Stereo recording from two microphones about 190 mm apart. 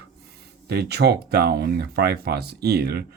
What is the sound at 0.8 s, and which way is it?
Speech, 60° right (ahead or behind).